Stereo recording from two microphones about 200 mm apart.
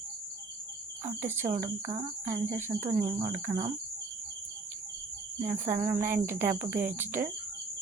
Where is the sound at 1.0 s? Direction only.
10° right (ahead or behind).